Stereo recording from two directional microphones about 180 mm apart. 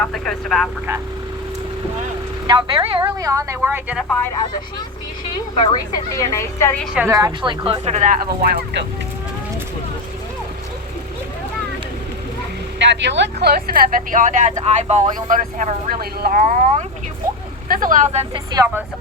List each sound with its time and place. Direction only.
0.0 s speech: 5° left (ahead or behind)
2.5 s a woman's voice: 25° right (ahead or behind); by 4.0 s 10° right (ahead or behind)
5.5 s a woman's voice: 25° left (ahead or behind)
6.9 s a woman's voice: 10° right (ahead or behind)
7.2 s speech: 25° right (ahead or behind); by 8.8 s 60° right (ahead or behind)
12.8 s speech: 80° right; by 18.4 s 40° right (ahead or behind)